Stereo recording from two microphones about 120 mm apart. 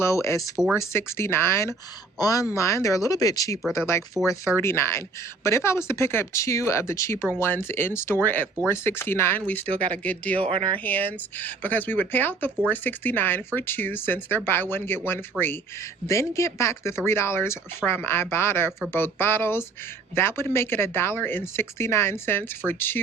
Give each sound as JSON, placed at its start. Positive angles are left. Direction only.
{"t": 0.0, "sound": "speech", "side_deg": 25}
{"t": 10.5, "sound": "speech", "side_deg": -55}
{"t": 10.8, "sound": "speech", "side_deg": 15}